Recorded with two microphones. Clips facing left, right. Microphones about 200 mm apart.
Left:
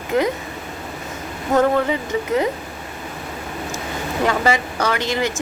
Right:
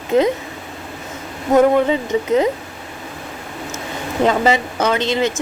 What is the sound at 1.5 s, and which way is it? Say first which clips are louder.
A woman's voice: right 4 dB; 20° right (ahead or behind).